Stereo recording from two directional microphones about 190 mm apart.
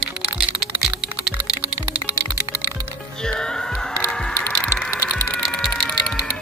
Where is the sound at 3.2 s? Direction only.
5° left (ahead or behind).